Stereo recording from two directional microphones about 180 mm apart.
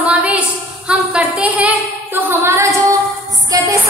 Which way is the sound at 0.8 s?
5° right (ahead or behind).